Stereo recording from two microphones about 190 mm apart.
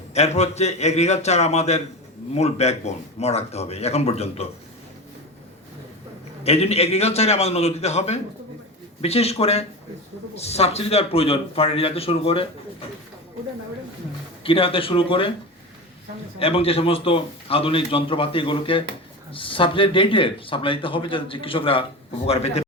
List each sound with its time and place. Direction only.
0.1 s speech: 35° left (ahead or behind)
6.4 s speech: 35° left (ahead or behind)
14.4 s speech: 30° left (ahead or behind)
16.4 s speech: 30° left (ahead or behind)